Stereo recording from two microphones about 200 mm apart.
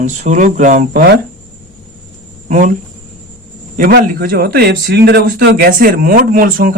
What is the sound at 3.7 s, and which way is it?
A man's voice, 45° right (ahead or behind).